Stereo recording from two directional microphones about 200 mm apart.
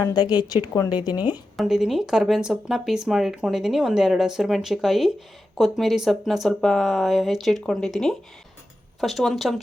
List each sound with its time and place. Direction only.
0.0 s a woman's voice: 20° left (ahead or behind)
1.5 s speech: centre (ahead or behind)